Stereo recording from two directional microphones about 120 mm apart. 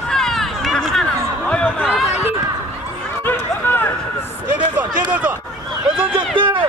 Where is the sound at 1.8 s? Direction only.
5° right (ahead or behind).